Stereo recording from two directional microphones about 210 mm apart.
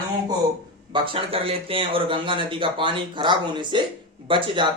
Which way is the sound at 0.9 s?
25° right (ahead or behind).